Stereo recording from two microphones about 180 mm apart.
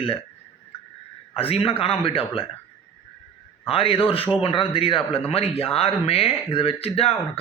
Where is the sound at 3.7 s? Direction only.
30° left (ahead or behind).